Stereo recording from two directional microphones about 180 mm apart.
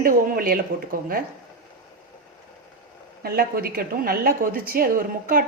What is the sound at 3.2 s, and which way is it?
A woman's voice, 55° right (ahead or behind).